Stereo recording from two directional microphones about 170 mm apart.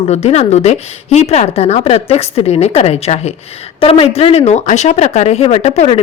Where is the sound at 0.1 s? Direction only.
40° left (ahead or behind).